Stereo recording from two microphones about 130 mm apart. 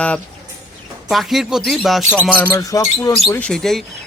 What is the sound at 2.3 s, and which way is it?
Speech, 20° left (ahead or behind).